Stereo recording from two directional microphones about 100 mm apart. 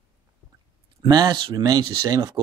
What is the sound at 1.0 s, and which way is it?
Speech, 45° right (ahead or behind).